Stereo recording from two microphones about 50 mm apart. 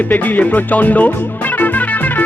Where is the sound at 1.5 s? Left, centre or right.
Left.